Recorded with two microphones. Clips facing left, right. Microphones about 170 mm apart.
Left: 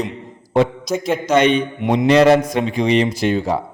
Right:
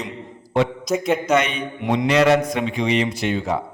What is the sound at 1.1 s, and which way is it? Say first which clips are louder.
A man's voice: left 7 dB; 30° left (ahead or behind).